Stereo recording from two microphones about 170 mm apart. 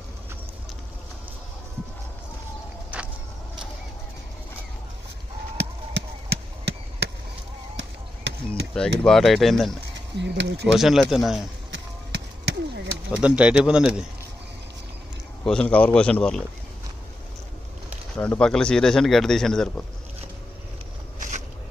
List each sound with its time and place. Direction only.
2.9 s vehicle: 10° right (ahead or behind)
5.6 s a sound: 85° right
7.7 s chop: 90° right
8.7 s speech: 5° left (ahead or behind)
10.1 s speech: 90° right
10.7 s speech: centre (ahead or behind)
13.2 s speech: 5° right (ahead or behind)
15.4 s speech: 5° left (ahead or behind)
18.1 s speech: 5° left (ahead or behind)